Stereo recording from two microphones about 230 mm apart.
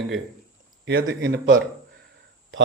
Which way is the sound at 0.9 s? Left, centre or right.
Right.